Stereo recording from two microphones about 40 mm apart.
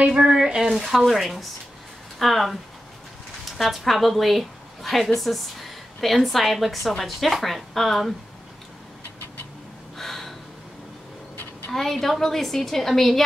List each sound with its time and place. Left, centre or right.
0.1 s speech: right
0.7 s a woman's voice: centre
9.9 s gasp: centre
11.7 s a woman's voice: centre